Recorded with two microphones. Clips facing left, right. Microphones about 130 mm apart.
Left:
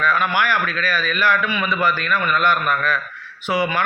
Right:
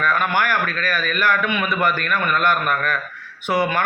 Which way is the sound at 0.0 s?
50° right (ahead or behind).